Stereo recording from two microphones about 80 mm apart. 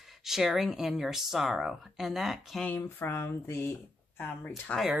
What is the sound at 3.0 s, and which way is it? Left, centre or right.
Speech, left.